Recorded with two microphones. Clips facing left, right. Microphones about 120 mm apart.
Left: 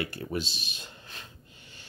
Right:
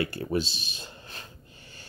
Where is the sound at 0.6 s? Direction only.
35° right (ahead or behind).